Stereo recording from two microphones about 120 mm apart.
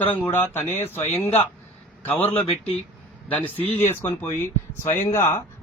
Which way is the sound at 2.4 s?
55° left (ahead or behind).